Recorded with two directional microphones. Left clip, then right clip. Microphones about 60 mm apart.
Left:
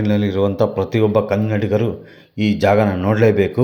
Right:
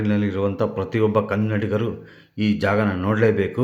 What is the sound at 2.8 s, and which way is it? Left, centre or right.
Speech, centre.